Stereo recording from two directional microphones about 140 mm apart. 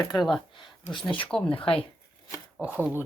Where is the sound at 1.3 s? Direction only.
10° left (ahead or behind).